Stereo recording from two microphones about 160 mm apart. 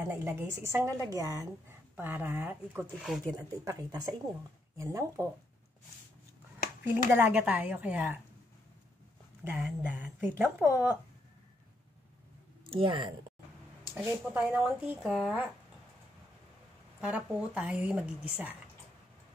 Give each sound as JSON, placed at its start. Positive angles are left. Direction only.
{"t": 0.1, "sound": "speech", "side_deg": -15}
{"t": 2.8, "sound": "speech", "side_deg": 0}
{"t": 3.3, "sound": "speech", "side_deg": -20}
{"t": 7.1, "sound": "speech", "side_deg": -10}
{"t": 9.4, "sound": "speech", "side_deg": -10}
{"t": 12.6, "sound": "speech", "side_deg": -30}
{"t": 13.9, "sound": "speech", "side_deg": -5}
{"t": 17.0, "sound": "speech", "side_deg": -10}